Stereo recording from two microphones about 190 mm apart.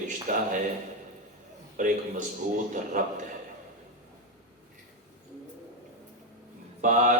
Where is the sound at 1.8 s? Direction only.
45° right (ahead or behind).